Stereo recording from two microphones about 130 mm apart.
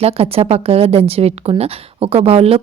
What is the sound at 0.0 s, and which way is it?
Speech, 50° right (ahead or behind).